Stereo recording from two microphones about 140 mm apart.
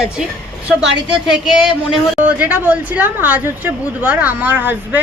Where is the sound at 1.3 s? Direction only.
5° right (ahead or behind).